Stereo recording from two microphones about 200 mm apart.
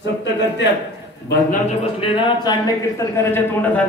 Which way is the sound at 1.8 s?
25° left (ahead or behind).